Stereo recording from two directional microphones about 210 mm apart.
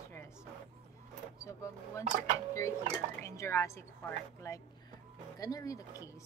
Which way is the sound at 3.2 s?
10° left (ahead or behind).